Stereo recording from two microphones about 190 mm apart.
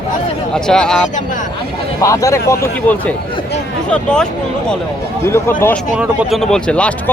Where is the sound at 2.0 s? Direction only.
15° left (ahead or behind).